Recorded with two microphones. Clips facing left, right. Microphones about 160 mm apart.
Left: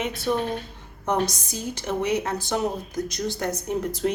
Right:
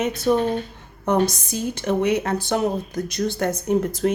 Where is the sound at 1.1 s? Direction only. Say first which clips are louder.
Right 5 dB; 60° right (ahead or behind).